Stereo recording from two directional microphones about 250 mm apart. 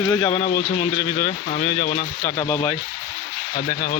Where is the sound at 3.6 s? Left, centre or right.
Left.